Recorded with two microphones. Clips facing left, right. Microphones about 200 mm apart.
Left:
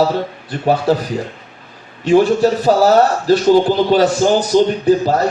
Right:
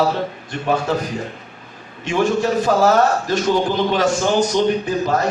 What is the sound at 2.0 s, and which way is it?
Speech, 35° left (ahead or behind).